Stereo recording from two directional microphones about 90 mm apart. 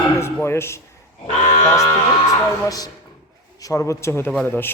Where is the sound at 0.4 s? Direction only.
30° left (ahead or behind).